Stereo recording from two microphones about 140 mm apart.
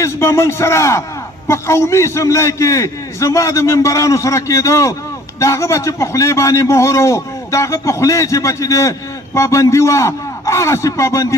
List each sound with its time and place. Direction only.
0.0 s a man's voice: 20° left (ahead or behind)